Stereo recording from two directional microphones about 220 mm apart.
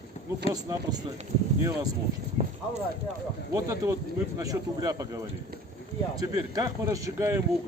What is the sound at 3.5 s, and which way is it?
Speech, 15° right (ahead or behind).